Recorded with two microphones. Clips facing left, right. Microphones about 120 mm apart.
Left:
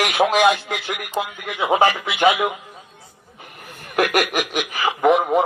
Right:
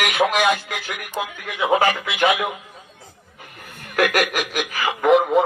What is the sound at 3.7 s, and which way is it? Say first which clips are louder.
Speech: left 1 dB; 25° left (ahead or behind).